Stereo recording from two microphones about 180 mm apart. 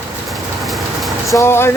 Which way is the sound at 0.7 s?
Centre (ahead or behind).